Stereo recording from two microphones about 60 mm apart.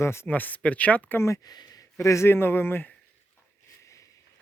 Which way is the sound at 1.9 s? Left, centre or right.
Left.